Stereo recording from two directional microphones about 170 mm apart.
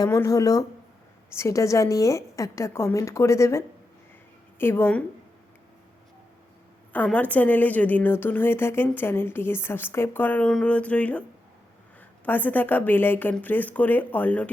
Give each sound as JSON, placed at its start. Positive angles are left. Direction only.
{"t": 0.0, "sound": "a woman's voice", "side_deg": 20}
{"t": 6.9, "sound": "a woman's voice", "side_deg": 10}